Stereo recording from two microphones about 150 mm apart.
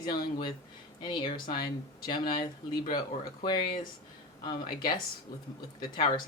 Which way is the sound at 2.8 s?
65° left (ahead or behind).